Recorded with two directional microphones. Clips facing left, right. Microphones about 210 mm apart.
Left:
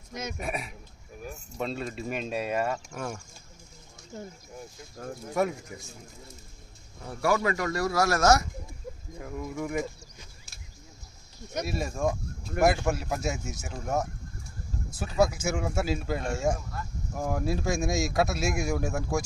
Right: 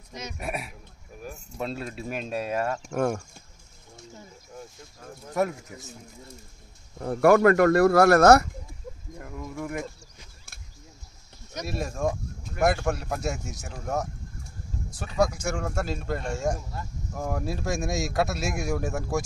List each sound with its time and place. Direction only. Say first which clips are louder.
0.4 s speech: even; 5° right (ahead or behind)
2.9 s speech: right 10 dB; 50° right (ahead or behind)
5.3 s speech: right 1 dB; centre (ahead or behind)
7.0 s speech: right 9 dB; 55° right (ahead or behind)
9.2 s speech: left 1 dB; centre (ahead or behind)
11.6 s speech: right 1 dB; centre (ahead or behind)
14.9 s speech: even; centre (ahead or behind)